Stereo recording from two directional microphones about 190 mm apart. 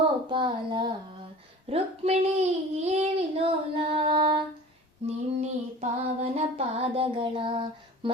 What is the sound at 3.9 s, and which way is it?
Music, 25° right (ahead or behind).